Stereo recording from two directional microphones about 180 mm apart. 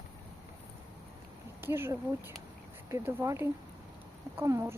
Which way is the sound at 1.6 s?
15° right (ahead or behind).